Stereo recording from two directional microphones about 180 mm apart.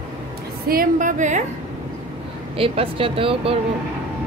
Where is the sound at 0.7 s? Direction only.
50° right (ahead or behind).